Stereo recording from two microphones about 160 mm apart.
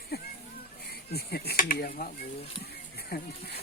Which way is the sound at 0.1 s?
75° left (ahead or behind).